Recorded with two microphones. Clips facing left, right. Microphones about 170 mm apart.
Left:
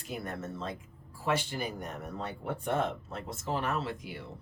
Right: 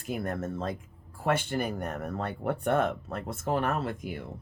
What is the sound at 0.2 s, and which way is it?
Speech, 50° right (ahead or behind).